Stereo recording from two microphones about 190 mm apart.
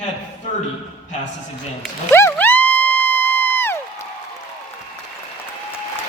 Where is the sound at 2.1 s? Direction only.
10° left (ahead or behind).